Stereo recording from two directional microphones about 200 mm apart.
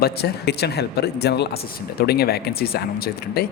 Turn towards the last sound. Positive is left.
turn(degrees=50)  # may be behind; listen again after turning